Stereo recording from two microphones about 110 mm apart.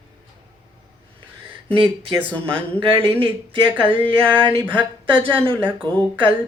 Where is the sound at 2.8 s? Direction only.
50° right (ahead or behind).